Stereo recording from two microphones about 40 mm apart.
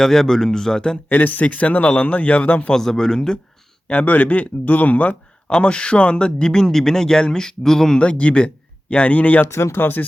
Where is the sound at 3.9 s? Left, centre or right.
Left.